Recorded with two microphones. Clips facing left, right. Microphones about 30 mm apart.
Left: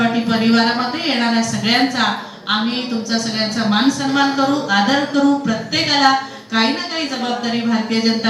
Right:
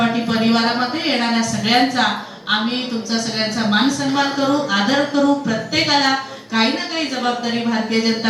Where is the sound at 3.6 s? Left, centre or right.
Centre.